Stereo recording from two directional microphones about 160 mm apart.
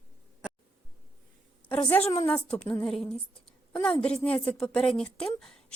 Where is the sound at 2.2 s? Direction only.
5° left (ahead or behind).